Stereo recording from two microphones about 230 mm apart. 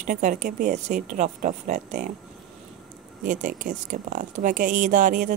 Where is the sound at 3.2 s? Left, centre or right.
Right.